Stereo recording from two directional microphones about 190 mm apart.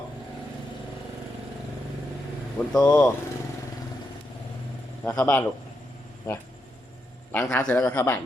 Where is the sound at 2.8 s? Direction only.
15° left (ahead or behind).